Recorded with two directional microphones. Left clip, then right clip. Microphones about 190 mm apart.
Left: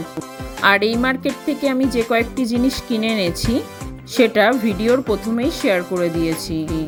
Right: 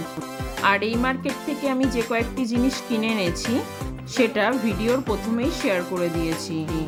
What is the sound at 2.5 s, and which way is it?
Speech, centre (ahead or behind).